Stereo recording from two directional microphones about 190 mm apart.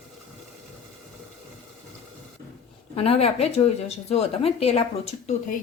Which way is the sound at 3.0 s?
30° left (ahead or behind).